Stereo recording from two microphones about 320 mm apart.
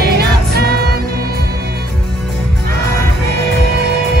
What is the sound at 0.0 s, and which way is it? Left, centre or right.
Music, right.